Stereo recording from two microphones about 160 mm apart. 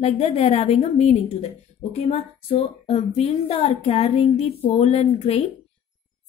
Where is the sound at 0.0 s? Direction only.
40° left (ahead or behind).